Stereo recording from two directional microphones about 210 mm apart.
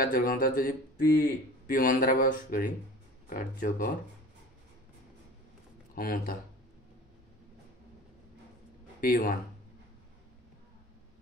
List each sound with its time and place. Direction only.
0.0 s a man's voice: 40° left (ahead or behind)
5.9 s speech: 45° left (ahead or behind)
9.0 s speech: 40° left (ahead or behind)